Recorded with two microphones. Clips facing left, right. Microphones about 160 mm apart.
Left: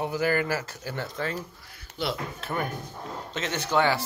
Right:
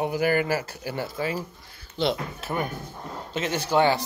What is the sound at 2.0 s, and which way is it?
Speech, 30° right (ahead or behind).